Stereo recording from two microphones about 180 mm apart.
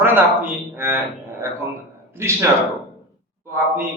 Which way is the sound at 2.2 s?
15° right (ahead or behind).